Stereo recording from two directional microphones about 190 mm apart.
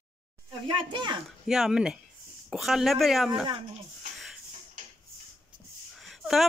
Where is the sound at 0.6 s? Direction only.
25° right (ahead or behind).